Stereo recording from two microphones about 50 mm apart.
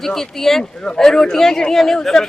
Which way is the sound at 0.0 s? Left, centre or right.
Centre.